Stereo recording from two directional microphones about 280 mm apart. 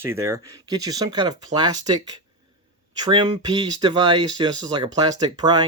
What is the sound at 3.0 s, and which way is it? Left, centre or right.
Speech, centre.